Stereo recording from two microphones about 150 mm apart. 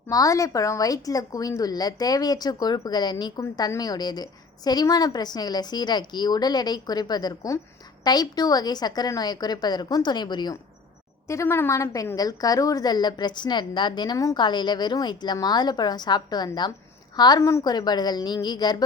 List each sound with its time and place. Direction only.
0.1 s a woman's voice: 25° left (ahead or behind)
11.3 s a woman's voice: 20° left (ahead or behind)